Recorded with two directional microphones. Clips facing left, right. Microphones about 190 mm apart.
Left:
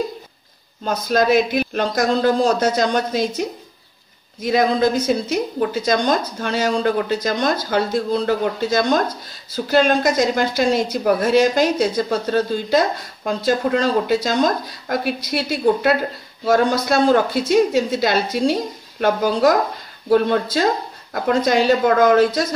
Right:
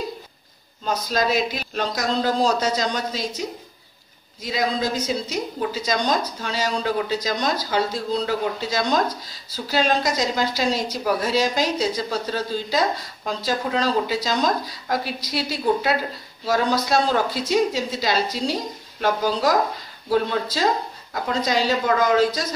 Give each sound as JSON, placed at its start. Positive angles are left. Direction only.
{"t": 0.8, "sound": "a woman's voice", "side_deg": 55}